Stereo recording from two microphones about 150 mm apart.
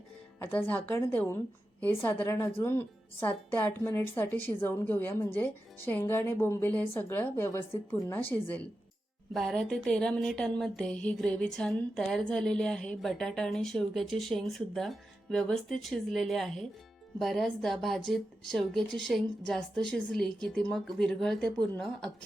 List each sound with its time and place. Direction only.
0.3 s a woman's voice: 10° left (ahead or behind)
9.3 s speech: centre (ahead or behind)